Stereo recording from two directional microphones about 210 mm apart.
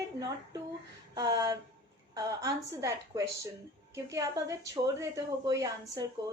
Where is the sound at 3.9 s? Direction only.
15° right (ahead or behind).